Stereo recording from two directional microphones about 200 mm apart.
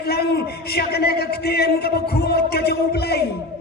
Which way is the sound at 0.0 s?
50° left (ahead or behind).